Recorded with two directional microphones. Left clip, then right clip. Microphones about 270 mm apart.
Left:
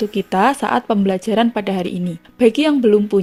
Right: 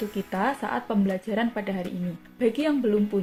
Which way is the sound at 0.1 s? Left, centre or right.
Left.